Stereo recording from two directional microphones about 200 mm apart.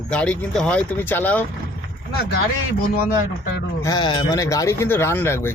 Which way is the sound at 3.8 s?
20° left (ahead or behind).